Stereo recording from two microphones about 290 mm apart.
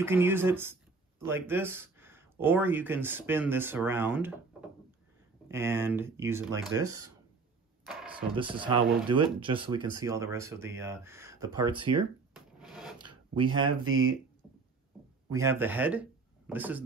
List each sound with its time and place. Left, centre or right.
0.0 s speech: centre
7.8 s a sound: centre
8.4 s speech: centre
12.4 s rub: centre
13.0 s a sound: centre
13.8 s speech: right
15.2 s speech: centre